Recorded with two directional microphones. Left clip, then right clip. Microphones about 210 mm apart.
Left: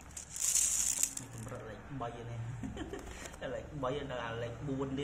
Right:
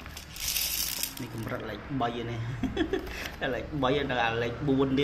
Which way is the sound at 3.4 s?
35° right (ahead or behind).